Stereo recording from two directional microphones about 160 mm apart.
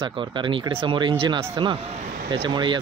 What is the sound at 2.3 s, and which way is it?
Speech, 30° right (ahead or behind).